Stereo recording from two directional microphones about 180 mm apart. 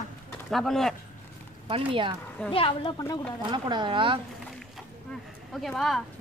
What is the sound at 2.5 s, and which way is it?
Speech, 30° left (ahead or behind).